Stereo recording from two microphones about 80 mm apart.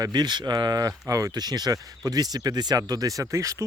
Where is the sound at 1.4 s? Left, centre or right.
Right.